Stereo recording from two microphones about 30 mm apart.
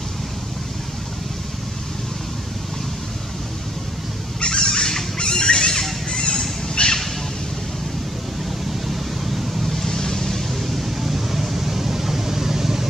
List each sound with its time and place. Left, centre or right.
4.4 s fowl: left
6.0 s a sound: left
8.8 s vehicle: centre
9.8 s vehicle: centre
10.7 s vehicle: centre